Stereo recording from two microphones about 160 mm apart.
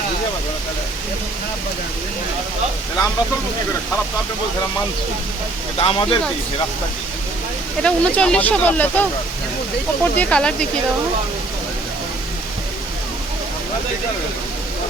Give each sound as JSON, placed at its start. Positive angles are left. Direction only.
{"t": 5.7, "sound": "speech", "side_deg": 35}
{"t": 7.8, "sound": "speech", "side_deg": 5}